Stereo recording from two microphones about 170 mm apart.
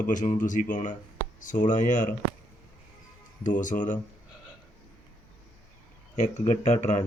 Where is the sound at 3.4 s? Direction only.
50° left (ahead or behind).